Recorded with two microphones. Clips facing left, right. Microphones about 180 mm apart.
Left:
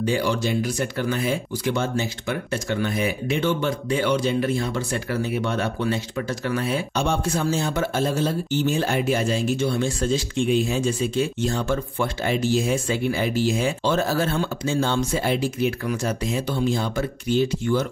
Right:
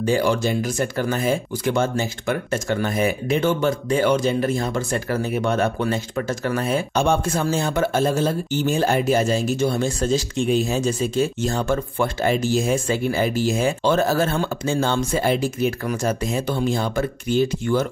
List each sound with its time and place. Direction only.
0.0 s speech: 45° right (ahead or behind)